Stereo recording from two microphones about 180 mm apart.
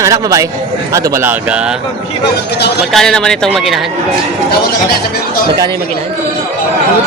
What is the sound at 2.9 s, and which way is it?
Speech, centre (ahead or behind).